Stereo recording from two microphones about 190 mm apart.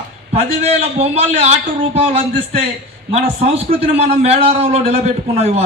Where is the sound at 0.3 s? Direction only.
35° right (ahead or behind).